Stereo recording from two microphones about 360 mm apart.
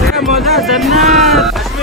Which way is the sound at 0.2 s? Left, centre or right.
Centre.